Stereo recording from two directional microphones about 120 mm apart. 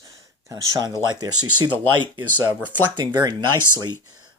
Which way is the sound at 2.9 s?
40° right (ahead or behind).